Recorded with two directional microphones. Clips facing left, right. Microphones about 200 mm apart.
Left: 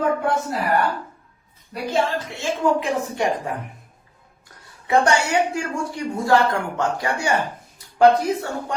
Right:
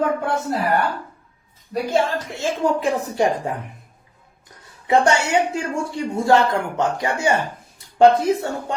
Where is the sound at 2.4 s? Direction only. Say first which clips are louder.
Right 1 dB; 40° right (ahead or behind).